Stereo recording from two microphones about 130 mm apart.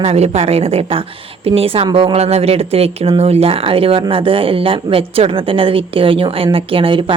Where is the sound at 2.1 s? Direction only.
50° right (ahead or behind).